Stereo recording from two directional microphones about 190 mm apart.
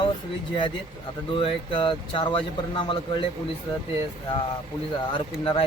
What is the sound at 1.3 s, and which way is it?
Speech, 25° left (ahead or behind).